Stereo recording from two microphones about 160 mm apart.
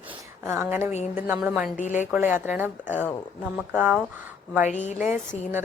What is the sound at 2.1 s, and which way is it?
A woman's voice, 10° right (ahead or behind).